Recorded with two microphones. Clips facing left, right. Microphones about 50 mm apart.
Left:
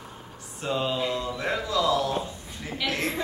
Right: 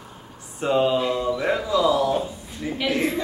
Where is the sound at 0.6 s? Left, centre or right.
Right.